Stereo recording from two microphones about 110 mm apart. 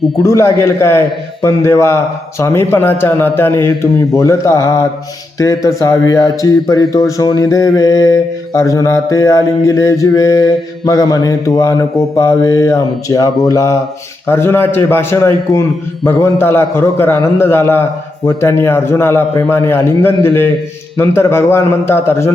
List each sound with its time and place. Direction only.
0.2 s a man's voice: 30° left (ahead or behind)
4.2 s mantra: 30° left (ahead or behind)
13.5 s a man's voice: 30° left (ahead or behind)